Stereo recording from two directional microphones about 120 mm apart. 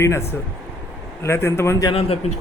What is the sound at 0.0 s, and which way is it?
A man's voice, 20° left (ahead or behind).